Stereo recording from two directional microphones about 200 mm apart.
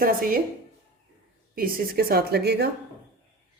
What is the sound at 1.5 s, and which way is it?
A woman's voice, 45° right (ahead or behind).